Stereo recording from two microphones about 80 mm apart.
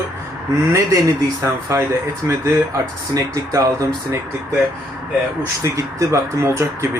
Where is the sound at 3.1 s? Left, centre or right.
Right.